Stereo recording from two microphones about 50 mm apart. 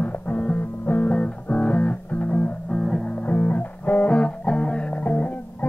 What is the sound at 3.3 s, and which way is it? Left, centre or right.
Music, left.